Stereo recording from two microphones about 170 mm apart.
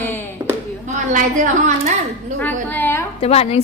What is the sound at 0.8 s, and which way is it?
Speech, 50° right (ahead or behind).